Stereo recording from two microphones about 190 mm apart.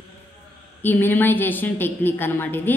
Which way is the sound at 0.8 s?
10° left (ahead or behind).